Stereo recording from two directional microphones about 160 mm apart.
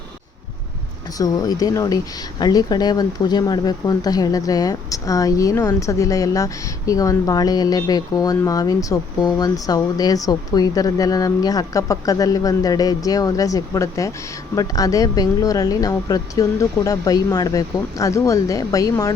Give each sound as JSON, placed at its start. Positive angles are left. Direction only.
{"t": 1.2, "sound": "speech", "side_deg": 25}